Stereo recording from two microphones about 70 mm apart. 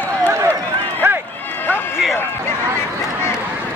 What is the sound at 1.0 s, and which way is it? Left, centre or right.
Run, right.